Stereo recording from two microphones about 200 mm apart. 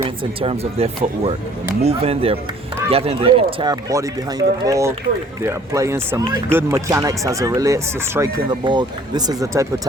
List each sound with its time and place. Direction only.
0.3 s speech: 30° right (ahead or behind)